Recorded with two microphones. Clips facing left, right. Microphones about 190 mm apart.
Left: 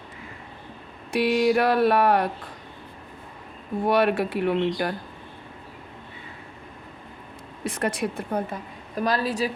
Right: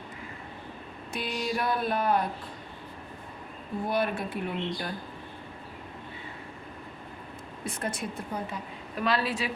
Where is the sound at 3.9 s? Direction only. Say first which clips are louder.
Left 8 dB; 75° left (ahead or behind).